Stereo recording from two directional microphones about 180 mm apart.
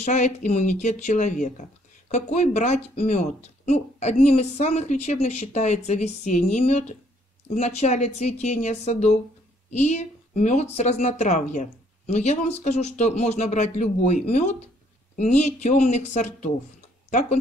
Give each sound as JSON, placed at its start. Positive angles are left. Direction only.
{"t": 0.0, "sound": "speech", "side_deg": 40}